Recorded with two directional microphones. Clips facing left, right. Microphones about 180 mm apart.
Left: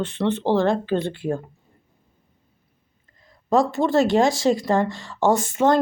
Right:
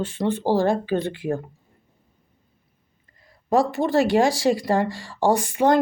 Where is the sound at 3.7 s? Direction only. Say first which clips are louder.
Left 1 dB; 15° right (ahead or behind).